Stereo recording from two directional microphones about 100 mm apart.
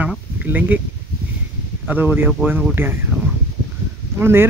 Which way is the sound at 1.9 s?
20° right (ahead or behind).